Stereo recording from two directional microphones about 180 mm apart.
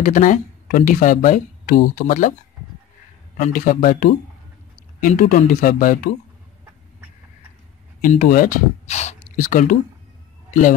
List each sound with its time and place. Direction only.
0.0 s speech: 45° left (ahead or behind)
3.3 s speech: 45° left (ahead or behind)
8.0 s speech: 45° left (ahead or behind)